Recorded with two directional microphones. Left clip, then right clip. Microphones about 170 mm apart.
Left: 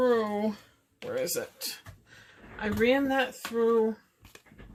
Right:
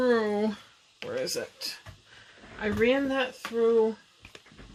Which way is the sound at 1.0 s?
10° right (ahead or behind).